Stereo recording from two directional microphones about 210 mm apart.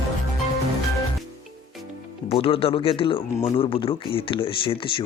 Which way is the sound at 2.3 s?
25° left (ahead or behind).